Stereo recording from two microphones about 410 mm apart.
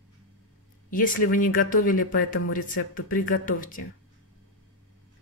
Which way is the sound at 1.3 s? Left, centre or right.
Centre.